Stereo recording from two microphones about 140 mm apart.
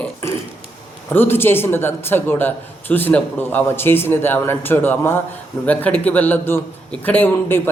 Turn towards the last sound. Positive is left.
turn(degrees=15)  # may be behind; listen again after turning